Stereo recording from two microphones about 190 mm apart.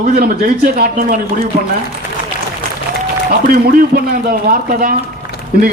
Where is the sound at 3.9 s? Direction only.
50° right (ahead or behind).